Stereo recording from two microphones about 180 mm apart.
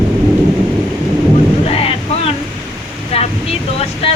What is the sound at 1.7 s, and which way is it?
Boat, 35° left (ahead or behind).